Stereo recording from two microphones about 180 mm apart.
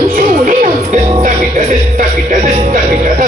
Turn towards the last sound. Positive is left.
turn(degrees=-45)  # may be behind; listen again after turning